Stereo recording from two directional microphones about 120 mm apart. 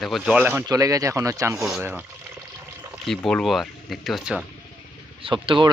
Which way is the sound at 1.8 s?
15° right (ahead or behind).